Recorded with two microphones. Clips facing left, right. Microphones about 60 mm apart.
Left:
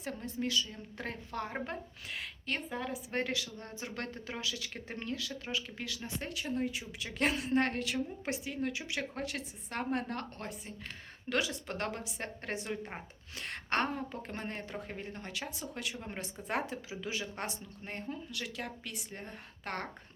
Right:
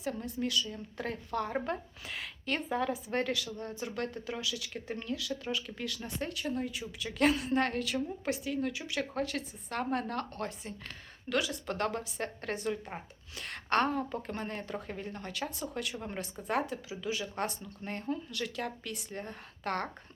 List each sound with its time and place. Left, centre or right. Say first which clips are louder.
0.2 s speech: right 1 dB; left
2.0 s speech: right 3 dB; centre
3.2 s speech: right 3 dB; left
5.5 s speech: even; centre
11.6 s speech: right 4 dB; centre
13.8 s speech: right 5 dB; centre
14.2 s speech: right 2 dB; left